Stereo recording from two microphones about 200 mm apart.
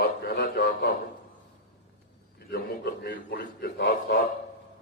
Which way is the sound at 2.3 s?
50° left (ahead or behind).